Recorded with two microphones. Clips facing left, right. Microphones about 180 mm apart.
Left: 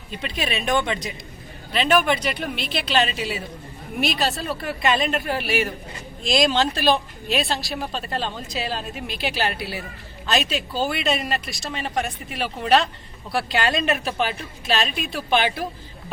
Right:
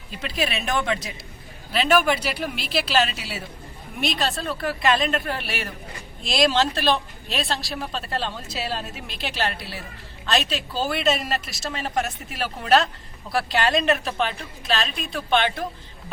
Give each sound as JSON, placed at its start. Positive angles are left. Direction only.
{"t": 0.1, "sound": "speech", "side_deg": 0}